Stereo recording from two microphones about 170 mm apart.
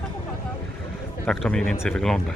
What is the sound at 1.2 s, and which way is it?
Speech, 5° left (ahead or behind).